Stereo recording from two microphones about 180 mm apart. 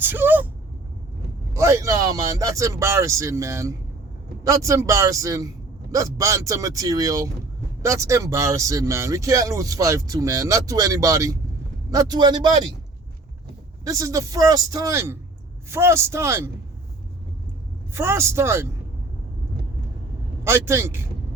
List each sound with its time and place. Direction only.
0.0 s speech: 10° right (ahead or behind)
1.5 s speech: 15° right (ahead or behind)
13.8 s speech: 20° right (ahead or behind)
17.9 s speech: 15° right (ahead or behind)
20.4 s speech: 15° right (ahead or behind)